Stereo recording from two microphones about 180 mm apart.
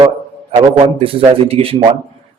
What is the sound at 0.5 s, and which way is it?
A man's voice, 30° right (ahead or behind).